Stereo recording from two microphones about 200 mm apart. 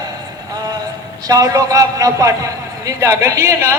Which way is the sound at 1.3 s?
15° right (ahead or behind).